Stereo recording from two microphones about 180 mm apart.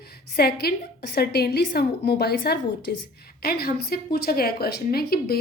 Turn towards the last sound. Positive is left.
turn(degrees=60)  # may be behind; listen again after turning